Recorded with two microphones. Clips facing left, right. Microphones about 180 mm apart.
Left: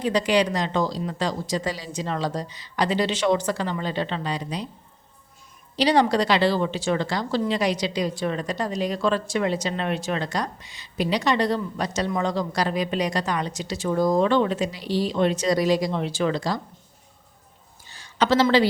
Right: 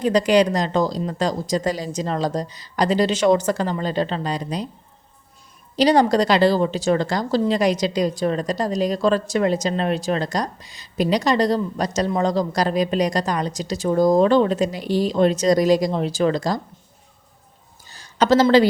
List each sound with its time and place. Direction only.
0.0 s a woman's voice: 45° right (ahead or behind)
5.7 s a woman's voice: 45° right (ahead or behind)
17.8 s a sound: 40° right (ahead or behind)